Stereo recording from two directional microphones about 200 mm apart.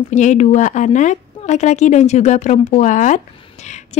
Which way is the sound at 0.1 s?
35° left (ahead or behind).